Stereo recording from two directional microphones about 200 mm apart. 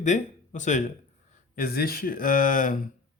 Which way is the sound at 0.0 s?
35° left (ahead or behind).